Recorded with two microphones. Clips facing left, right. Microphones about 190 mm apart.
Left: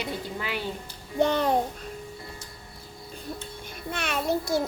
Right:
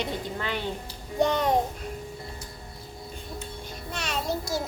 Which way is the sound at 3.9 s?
55° left (ahead or behind).